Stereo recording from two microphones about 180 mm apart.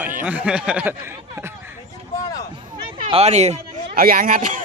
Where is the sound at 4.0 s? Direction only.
55° right (ahead or behind).